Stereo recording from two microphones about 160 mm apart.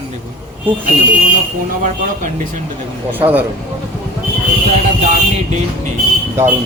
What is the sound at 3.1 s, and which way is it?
Speech, 10° right (ahead or behind).